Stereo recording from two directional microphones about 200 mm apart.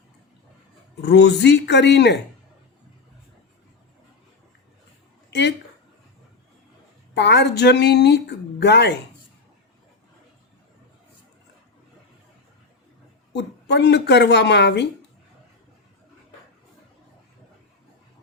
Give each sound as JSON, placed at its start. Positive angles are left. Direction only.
{"t": 1.0, "sound": "speech", "side_deg": 60}
{"t": 5.3, "sound": "a sound", "side_deg": 60}
{"t": 7.1, "sound": "speech", "side_deg": 55}
{"t": 13.3, "sound": "speech", "side_deg": 60}